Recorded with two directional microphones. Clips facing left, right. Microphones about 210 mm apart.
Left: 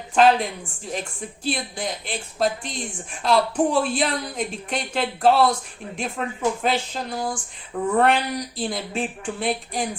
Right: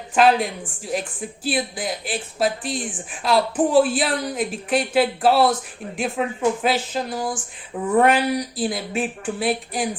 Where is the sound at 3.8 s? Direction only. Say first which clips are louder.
Right 2 dB; 5° right (ahead or behind).